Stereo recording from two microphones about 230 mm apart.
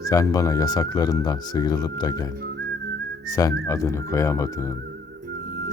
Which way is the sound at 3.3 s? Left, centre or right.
Centre.